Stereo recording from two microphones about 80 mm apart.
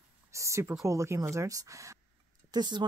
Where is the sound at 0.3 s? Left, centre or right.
Right.